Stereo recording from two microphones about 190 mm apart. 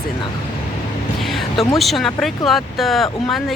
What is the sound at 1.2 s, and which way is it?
Speech, centre (ahead or behind).